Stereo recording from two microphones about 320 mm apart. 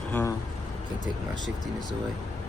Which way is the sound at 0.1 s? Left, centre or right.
Centre.